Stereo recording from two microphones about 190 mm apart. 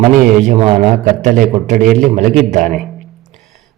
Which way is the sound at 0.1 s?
45° right (ahead or behind).